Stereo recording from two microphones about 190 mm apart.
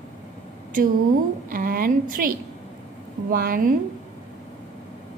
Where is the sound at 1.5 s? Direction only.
50° right (ahead or behind).